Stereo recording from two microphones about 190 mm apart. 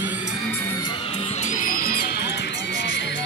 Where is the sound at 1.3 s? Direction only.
40° left (ahead or behind); by 3.1 s 65° left (ahead or behind).